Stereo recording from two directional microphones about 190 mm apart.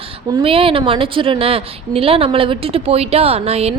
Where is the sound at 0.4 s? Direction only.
30° right (ahead or behind).